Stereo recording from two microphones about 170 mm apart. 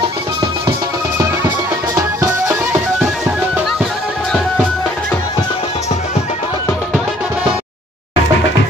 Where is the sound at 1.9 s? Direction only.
20° right (ahead or behind).